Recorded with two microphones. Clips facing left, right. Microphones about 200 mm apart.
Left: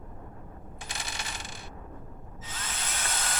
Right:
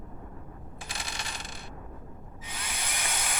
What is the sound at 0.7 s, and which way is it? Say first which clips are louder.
Coin: even; centre (ahead or behind).